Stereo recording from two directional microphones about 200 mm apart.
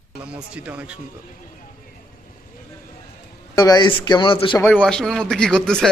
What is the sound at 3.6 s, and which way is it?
Speech, 20° left (ahead or behind).